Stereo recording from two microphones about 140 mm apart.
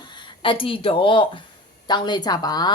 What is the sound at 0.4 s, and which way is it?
Speech, 40° left (ahead or behind).